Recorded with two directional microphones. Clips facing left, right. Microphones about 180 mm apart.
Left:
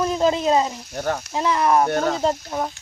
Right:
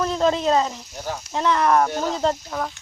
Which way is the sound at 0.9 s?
60° left (ahead or behind).